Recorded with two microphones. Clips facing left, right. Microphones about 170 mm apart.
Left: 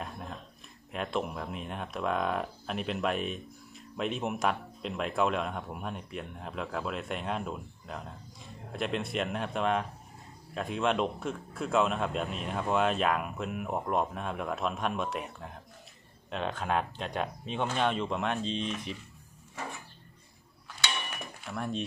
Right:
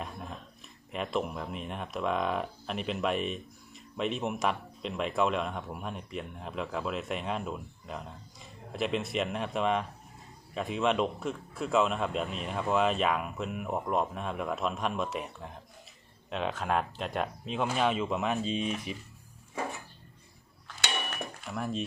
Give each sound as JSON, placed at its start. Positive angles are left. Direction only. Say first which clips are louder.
{"t": 0.0, "sound": "a sound", "louder": "even", "side_deg": 0}
{"t": 0.9, "sound": "speech", "louder": "right 1 dB", "side_deg": 0}
{"t": 21.4, "sound": "speech", "louder": "even", "side_deg": 0}